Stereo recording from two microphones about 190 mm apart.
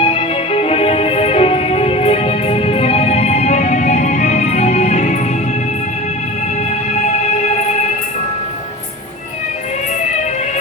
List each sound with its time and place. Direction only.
0.0 s music: 30° left (ahead or behind)
6.9 s music: 35° left (ahead or behind)